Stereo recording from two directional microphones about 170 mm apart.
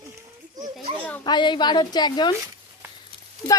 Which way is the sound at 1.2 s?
25° left (ahead or behind).